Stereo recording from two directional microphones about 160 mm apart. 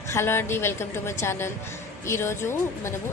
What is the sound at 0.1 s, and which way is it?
A woman's voice, 15° left (ahead or behind).